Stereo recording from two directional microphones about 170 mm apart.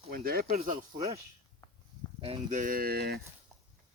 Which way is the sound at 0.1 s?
60° right (ahead or behind).